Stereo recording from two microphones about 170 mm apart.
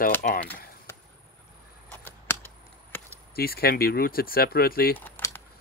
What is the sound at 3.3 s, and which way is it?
Speech, 65° left (ahead or behind).